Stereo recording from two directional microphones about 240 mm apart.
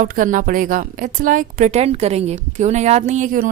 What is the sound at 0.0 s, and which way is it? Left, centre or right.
A woman's voice, right.